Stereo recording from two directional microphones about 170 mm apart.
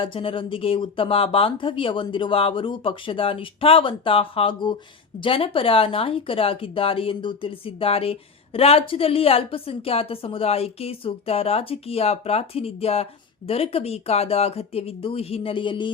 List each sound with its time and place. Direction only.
0.0 s speech: 30° left (ahead or behind)